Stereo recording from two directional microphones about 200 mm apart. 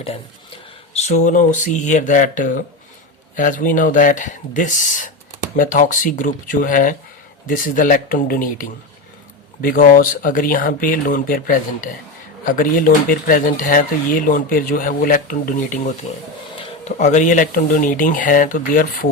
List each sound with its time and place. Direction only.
0.0 s speech: 30° left (ahead or behind)